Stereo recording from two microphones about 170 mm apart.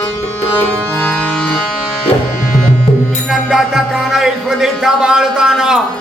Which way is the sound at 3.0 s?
Centre (ahead or behind).